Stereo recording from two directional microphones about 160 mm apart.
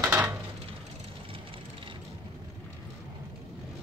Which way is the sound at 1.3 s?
35° right (ahead or behind).